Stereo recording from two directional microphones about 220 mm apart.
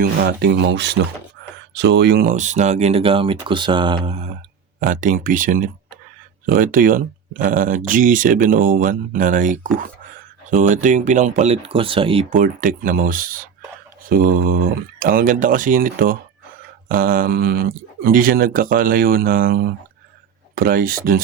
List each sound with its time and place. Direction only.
0.0 s speech: 45° right (ahead or behind)
1.4 s a sound: 50° right (ahead or behind)
1.7 s speech: 50° right (ahead or behind); by 4.3 s 25° right (ahead or behind)
4.8 s speech: 35° right (ahead or behind)
12.4 s speech: 35° right (ahead or behind)